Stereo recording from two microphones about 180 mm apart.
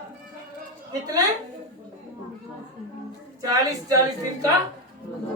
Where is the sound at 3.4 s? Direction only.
20° right (ahead or behind).